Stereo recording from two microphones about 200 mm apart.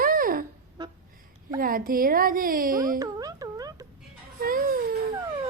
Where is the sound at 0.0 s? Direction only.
45° right (ahead or behind).